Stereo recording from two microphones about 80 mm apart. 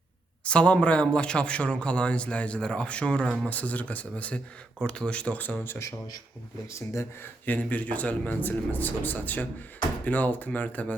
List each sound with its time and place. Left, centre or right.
0.4 s speech: centre
6.7 s speech: left
7.4 s a man's voice: centre